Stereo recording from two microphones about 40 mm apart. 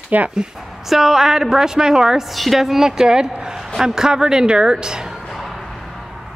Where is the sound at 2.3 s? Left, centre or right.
Centre.